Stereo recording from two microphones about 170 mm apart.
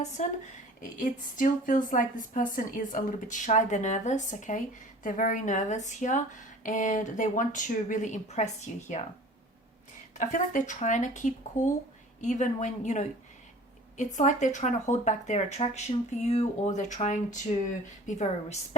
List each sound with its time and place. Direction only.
0.2 s a woman's voice: 45° left (ahead or behind)
10.2 s a woman's voice: 45° left (ahead or behind)